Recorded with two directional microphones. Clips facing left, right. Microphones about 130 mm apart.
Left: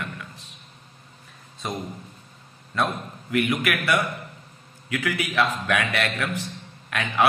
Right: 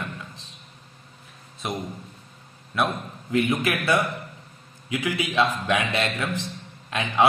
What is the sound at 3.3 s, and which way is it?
A man's voice, 25° right (ahead or behind).